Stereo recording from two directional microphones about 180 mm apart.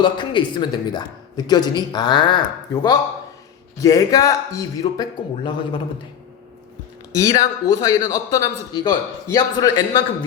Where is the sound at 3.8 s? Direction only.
20° left (ahead or behind).